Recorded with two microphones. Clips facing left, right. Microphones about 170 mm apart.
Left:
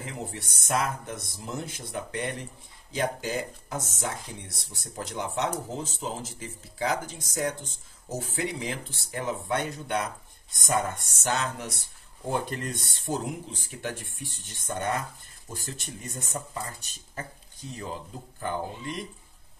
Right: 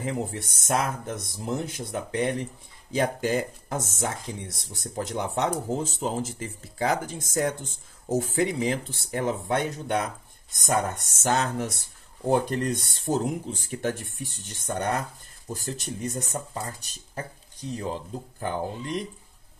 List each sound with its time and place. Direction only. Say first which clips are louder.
0.0 s speech: right 7 dB; 45° right (ahead or behind)